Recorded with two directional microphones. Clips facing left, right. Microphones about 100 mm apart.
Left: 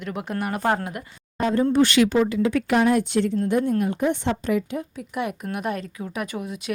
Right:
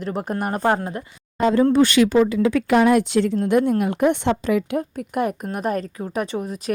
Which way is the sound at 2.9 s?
90° right.